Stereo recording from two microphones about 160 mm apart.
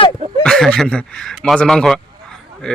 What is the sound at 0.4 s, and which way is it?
Speech, 5° left (ahead or behind).